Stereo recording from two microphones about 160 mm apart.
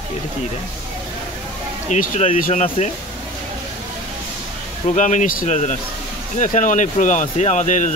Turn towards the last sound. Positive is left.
turn(degrees=50)  # may be behind; listen again after turning